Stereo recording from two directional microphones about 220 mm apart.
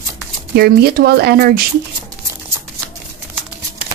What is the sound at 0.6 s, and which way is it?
Speech, 45° right (ahead or behind).